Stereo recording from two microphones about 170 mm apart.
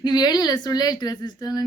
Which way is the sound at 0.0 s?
25° left (ahead or behind).